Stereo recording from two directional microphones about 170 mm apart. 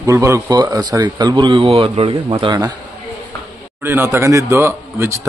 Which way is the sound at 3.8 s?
15° right (ahead or behind).